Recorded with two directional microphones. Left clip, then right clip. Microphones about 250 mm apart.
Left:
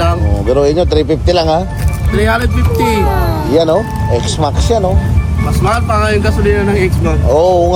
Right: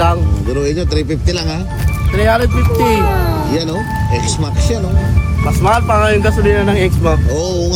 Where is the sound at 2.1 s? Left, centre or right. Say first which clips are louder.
Even; centre.